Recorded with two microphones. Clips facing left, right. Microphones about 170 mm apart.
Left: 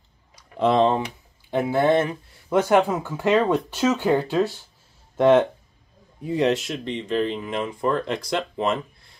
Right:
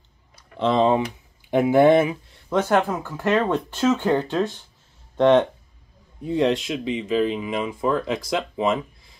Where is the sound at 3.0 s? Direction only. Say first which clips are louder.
Left 1 dB; 15° left (ahead or behind).